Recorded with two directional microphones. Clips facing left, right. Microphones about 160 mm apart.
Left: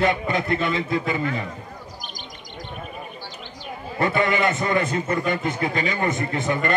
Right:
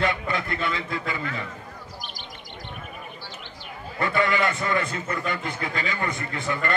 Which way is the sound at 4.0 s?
20° left (ahead or behind).